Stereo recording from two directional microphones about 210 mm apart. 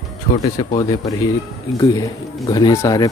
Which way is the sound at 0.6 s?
20° left (ahead or behind).